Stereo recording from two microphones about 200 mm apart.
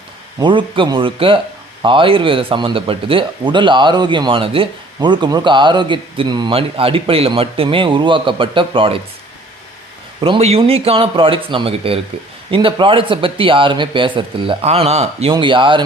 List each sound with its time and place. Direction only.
0.3 s speech: 25° right (ahead or behind)
10.2 s speech: 25° right (ahead or behind)